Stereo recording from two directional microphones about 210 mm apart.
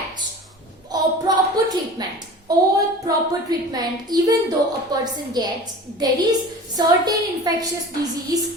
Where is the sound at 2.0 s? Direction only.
20° right (ahead or behind).